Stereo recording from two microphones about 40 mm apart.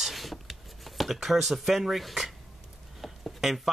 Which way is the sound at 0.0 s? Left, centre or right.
Centre.